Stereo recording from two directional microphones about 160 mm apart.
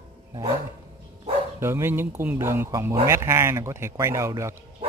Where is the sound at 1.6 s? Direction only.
15° right (ahead or behind).